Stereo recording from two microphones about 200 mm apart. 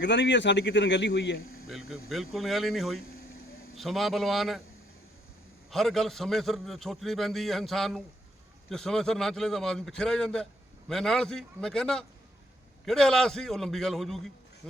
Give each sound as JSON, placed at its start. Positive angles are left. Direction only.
{"t": 0.0, "sound": "speech", "side_deg": 60}
{"t": 1.9, "sound": "a man's voice", "side_deg": 0}
{"t": 5.7, "sound": "a man's voice", "side_deg": 0}